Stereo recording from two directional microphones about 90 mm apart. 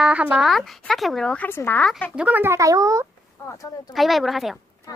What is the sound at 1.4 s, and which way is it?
Speech, 25° left (ahead or behind).